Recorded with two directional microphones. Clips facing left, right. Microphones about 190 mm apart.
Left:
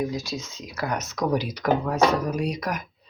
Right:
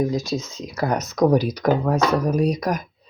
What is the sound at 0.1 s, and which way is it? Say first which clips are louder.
Speech: right 6 dB; 45° right (ahead or behind).